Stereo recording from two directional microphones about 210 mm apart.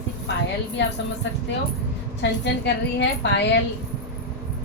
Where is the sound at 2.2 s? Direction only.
55° left (ahead or behind).